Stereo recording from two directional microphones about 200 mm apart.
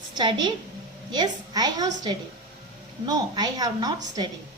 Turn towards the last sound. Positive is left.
turn(degrees=-20)  # may be behind; listen again after turning